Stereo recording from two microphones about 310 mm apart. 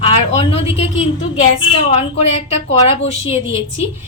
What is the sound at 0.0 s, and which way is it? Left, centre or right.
A woman's voice, centre.